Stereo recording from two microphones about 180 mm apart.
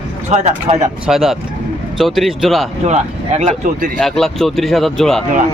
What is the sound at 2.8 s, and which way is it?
Speech, 40° right (ahead or behind).